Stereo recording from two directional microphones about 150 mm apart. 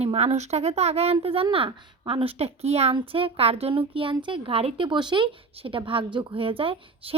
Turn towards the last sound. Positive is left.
turn(degrees=-40)  # may be behind; listen again after turning